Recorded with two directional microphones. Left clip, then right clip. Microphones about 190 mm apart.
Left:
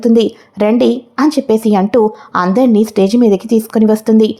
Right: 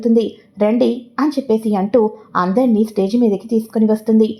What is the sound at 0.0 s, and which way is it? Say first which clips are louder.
Speech: left 5 dB; 25° left (ahead or behind).